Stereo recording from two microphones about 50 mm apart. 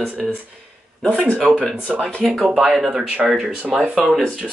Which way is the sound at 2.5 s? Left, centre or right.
Centre.